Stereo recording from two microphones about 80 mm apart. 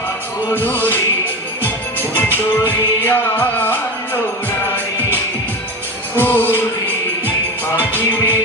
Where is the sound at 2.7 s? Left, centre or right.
Left.